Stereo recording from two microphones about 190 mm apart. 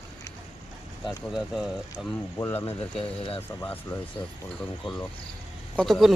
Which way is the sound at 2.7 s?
30° left (ahead or behind).